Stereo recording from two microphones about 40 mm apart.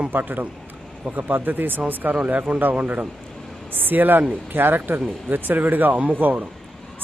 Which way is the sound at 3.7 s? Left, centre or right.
Right.